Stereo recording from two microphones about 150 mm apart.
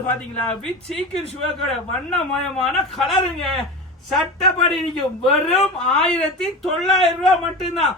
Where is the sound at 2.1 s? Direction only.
Centre (ahead or behind).